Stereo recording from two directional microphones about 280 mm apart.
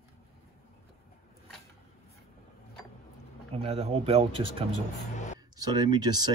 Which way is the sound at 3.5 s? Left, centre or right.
Right.